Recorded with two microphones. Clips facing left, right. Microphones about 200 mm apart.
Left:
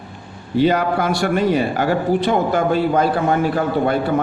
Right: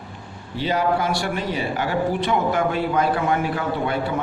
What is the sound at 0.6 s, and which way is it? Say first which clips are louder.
A man's voice: left 5 dB; 50° left (ahead or behind).